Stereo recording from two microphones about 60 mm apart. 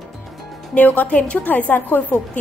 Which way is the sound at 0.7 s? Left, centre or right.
Left.